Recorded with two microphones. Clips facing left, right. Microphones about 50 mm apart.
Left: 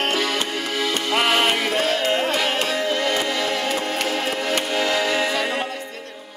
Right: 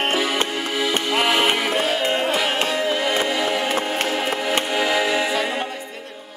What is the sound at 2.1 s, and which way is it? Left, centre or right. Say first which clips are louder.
Carnatic music: even; centre.